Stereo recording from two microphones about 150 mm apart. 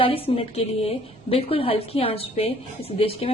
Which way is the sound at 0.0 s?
40° left (ahead or behind).